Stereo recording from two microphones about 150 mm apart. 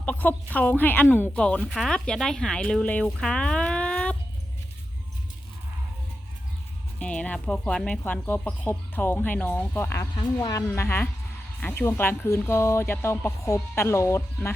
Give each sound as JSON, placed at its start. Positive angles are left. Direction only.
{"t": 0.0, "sound": "speech", "side_deg": 10}
{"t": 7.0, "sound": "a woman's voice", "side_deg": 10}